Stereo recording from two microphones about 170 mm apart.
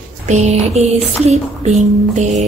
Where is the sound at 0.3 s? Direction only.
40° right (ahead or behind).